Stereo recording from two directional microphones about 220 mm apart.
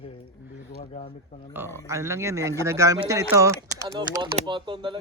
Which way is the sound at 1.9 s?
15° right (ahead or behind).